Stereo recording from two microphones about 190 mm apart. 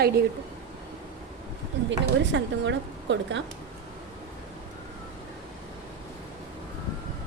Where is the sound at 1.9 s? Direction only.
70° right (ahead or behind).